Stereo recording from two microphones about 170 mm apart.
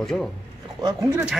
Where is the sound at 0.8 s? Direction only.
20° right (ahead or behind).